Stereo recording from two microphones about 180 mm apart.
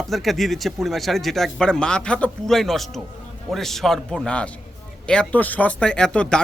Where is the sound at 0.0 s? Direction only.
Centre (ahead or behind).